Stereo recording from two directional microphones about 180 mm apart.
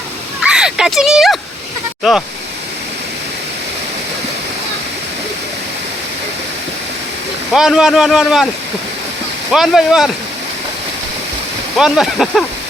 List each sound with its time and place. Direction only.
0.4 s a sound: 5° right (ahead or behind)
7.5 s speech: centre (ahead or behind)
9.5 s speech: centre (ahead or behind)
11.8 s speech: centre (ahead or behind)